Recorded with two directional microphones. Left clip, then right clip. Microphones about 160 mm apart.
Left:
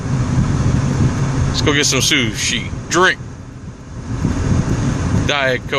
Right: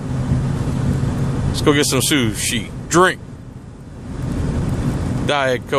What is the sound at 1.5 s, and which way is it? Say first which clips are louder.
Speech: even; 30° right (ahead or behind).